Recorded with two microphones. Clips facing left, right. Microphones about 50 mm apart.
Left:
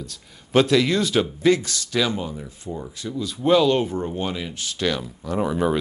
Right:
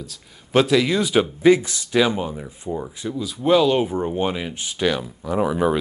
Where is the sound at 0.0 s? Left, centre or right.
Centre.